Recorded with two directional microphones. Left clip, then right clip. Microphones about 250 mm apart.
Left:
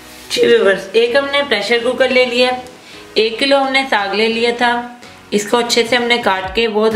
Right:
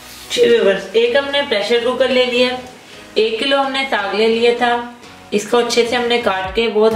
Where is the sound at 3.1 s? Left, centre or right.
Left.